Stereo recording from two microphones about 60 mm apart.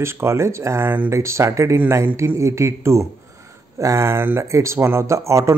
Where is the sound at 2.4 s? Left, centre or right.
Right.